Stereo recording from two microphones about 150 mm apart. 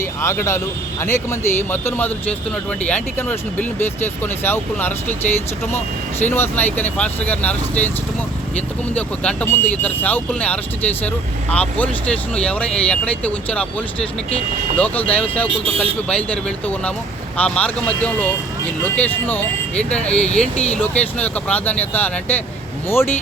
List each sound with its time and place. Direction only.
0.0 s speech: 20° left (ahead or behind)
6.2 s speech: 15° left (ahead or behind)
9.0 s speech: 10° left (ahead or behind)
17.3 s speech: 10° left (ahead or behind)